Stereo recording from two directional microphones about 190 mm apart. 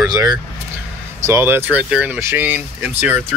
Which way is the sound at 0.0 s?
20° right (ahead or behind).